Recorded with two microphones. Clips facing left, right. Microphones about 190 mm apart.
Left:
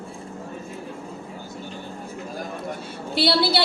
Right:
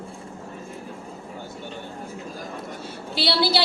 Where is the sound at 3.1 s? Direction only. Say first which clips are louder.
Left 2 dB; 55° left (ahead or behind).